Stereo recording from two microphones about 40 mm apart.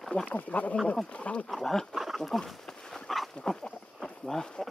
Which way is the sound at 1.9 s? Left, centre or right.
Centre.